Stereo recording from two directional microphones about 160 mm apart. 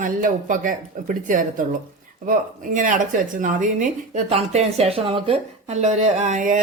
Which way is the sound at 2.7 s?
50° right (ahead or behind).